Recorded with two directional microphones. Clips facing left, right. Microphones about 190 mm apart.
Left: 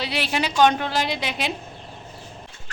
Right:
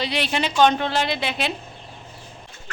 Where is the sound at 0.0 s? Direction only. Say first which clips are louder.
Right 1 dB; 5° left (ahead or behind).